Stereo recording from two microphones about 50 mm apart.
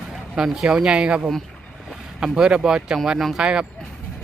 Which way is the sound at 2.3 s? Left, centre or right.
Centre.